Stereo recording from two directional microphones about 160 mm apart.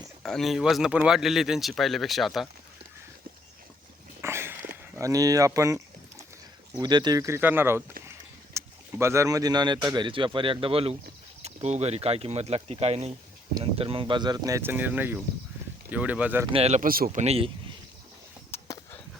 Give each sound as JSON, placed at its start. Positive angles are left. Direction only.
{"t": 0.2, "sound": "speech", "side_deg": 0}
{"t": 4.2, "sound": "a sound", "side_deg": -15}
{"t": 4.9, "sound": "speech", "side_deg": -20}
{"t": 16.5, "sound": "speech", "side_deg": -40}
{"t": 16.8, "sound": "speech", "side_deg": -65}
{"t": 17.2, "sound": "speech", "side_deg": -40}
{"t": 18.5, "sound": "a sound", "side_deg": 15}